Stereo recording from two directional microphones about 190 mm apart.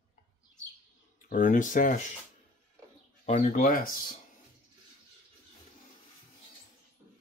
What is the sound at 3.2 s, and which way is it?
Speech, 40° left (ahead or behind).